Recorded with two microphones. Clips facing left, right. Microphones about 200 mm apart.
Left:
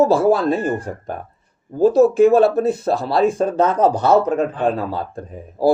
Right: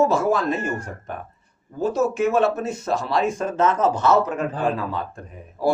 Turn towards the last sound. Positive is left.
turn(degrees=35)  # may be behind; listen again after turning